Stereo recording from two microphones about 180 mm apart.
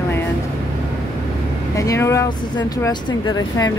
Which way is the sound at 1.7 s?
15° left (ahead or behind).